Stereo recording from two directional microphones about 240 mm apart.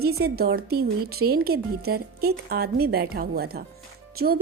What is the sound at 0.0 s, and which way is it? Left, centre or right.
A woman's voice, right.